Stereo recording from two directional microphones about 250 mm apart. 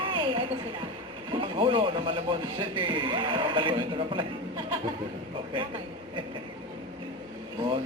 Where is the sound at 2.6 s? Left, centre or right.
Centre.